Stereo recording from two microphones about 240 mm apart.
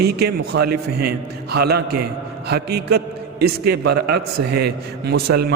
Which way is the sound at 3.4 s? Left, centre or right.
Right.